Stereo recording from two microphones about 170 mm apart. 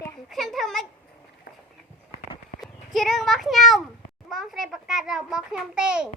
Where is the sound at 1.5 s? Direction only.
60° left (ahead or behind).